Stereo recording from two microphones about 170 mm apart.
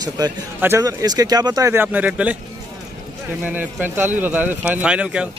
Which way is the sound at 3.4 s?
10° right (ahead or behind).